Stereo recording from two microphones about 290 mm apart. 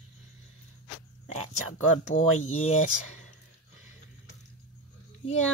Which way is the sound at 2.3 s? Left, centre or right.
Left.